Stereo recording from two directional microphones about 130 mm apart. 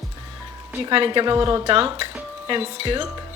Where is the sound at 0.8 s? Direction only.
45° right (ahead or behind).